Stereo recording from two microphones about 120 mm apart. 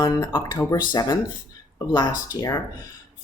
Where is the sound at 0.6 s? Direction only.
35° left (ahead or behind).